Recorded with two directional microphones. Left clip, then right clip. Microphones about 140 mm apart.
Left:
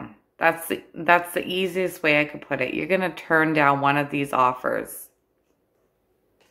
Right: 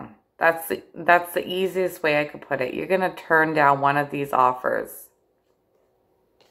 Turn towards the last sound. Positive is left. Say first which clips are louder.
# right 1 dB
turn(degrees=20)  # may be behind; listen again after turning